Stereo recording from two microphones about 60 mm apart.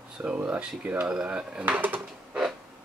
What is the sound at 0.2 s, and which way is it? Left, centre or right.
Speech, centre.